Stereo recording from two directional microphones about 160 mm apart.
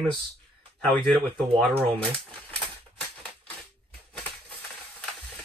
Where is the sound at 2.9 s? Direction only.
5° left (ahead or behind).